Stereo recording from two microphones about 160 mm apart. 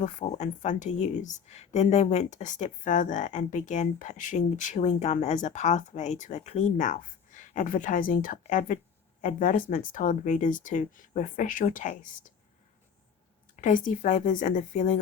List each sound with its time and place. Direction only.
0.0 s speech: 50° left (ahead or behind)
13.6 s speech: 55° left (ahead or behind)